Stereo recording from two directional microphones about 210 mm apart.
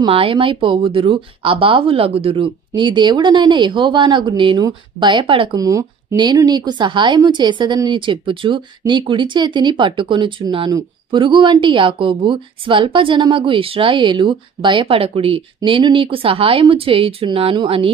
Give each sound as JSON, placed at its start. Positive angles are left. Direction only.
{"t": 0.0, "sound": "speech", "side_deg": -25}